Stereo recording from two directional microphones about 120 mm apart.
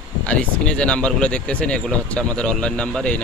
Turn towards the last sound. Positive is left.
turn(degrees=10)  # may be behind; listen again after turning